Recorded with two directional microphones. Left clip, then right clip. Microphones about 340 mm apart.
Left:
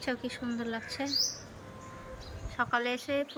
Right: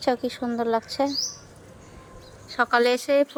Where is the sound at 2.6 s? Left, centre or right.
Centre.